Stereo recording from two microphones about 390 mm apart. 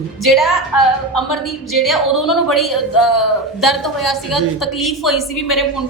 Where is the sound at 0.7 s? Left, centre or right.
Left.